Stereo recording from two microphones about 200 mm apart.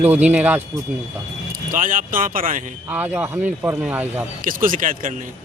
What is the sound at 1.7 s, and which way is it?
Speech, 40° right (ahead or behind).